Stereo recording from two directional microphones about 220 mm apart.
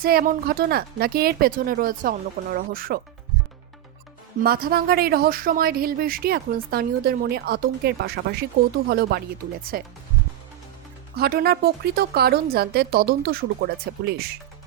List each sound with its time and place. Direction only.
0.0 s speech: 45° right (ahead or behind)
4.4 s speech: 45° right (ahead or behind)
11.2 s speech: 45° right (ahead or behind)